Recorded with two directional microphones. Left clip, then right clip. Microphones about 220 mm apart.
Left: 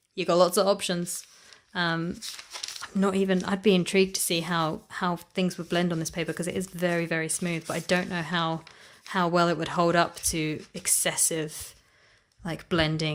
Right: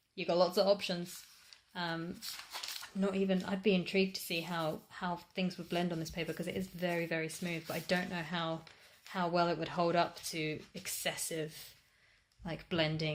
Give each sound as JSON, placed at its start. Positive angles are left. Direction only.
{"t": 0.2, "sound": "speech", "side_deg": 35}